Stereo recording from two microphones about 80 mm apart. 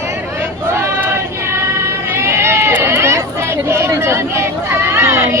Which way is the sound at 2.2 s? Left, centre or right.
Right.